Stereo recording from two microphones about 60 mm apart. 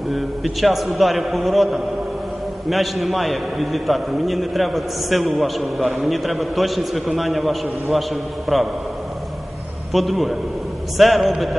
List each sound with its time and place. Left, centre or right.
0.1 s a man's voice: centre
9.9 s a man's voice: centre